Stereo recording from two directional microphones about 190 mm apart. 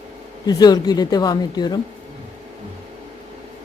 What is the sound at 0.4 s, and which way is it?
A woman's voice, 20° left (ahead or behind).